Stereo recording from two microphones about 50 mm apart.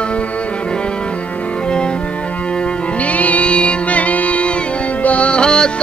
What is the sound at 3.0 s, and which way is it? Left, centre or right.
Music, left.